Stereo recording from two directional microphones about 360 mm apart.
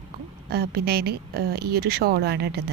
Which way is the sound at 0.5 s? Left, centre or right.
Right.